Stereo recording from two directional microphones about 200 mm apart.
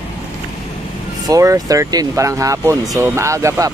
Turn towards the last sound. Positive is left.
turn(degrees=-15)  # may be behind; listen again after turning